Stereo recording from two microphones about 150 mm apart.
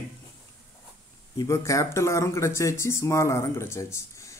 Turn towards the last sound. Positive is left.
turn(degrees=20)  # may be behind; listen again after turning